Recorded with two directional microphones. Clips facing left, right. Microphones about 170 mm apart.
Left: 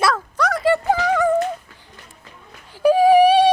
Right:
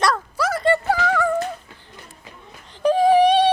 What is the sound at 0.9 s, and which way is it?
Music, 20° left (ahead or behind).